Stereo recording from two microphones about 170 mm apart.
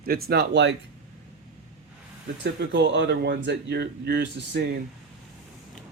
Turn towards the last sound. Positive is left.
turn(degrees=-85)